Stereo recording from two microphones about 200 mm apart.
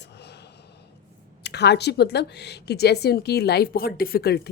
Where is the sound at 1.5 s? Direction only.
55° left (ahead or behind).